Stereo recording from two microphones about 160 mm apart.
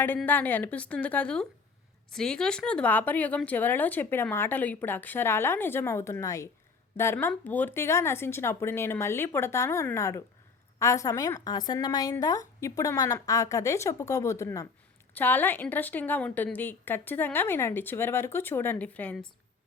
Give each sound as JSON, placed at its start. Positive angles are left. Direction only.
{"t": 0.3, "sound": "a woman's voice", "side_deg": 10}